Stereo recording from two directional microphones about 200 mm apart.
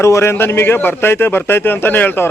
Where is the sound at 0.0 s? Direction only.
15° left (ahead or behind).